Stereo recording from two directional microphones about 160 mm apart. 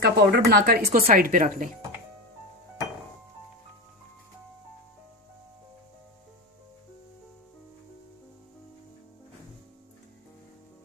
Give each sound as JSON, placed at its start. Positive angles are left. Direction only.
{"t": 0.0, "sound": "speech", "side_deg": -85}
{"t": 1.0, "sound": "speech", "side_deg": -60}